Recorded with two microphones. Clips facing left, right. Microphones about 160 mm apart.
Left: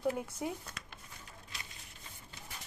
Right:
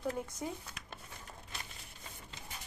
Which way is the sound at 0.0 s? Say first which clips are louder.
Left 3 dB; 10° left (ahead or behind).